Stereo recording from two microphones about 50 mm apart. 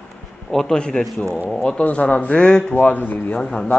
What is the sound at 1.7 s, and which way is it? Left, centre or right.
Speech, left.